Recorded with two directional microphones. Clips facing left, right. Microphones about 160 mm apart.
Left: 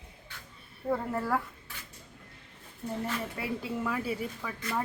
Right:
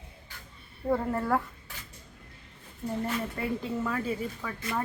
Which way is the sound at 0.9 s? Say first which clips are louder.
Right 3 dB; centre (ahead or behind).